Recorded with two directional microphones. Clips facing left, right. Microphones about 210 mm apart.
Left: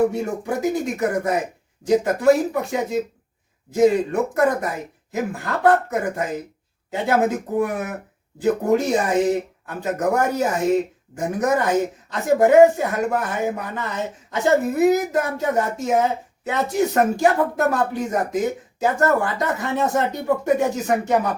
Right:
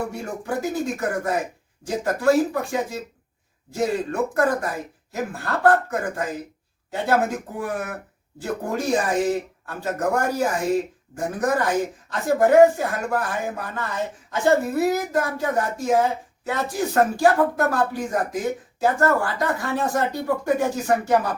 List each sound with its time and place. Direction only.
0.1 s speech: 20° left (ahead or behind)